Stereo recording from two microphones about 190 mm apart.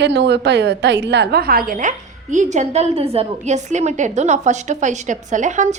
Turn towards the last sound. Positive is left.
turn(degrees=-40)  # may be behind; listen again after turning